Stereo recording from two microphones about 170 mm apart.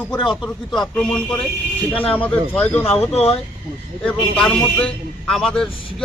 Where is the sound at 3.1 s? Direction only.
40° left (ahead or behind).